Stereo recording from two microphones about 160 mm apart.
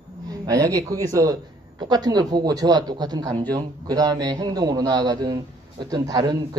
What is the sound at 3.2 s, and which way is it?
Speech, 10° left (ahead or behind).